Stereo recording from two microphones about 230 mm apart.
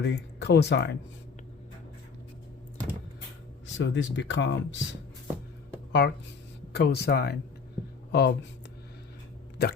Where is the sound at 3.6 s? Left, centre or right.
Left.